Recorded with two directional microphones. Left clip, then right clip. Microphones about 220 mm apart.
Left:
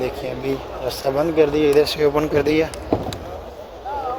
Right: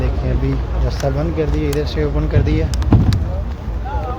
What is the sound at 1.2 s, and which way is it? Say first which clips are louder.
Speech: left 5 dB; 40° left (ahead or behind).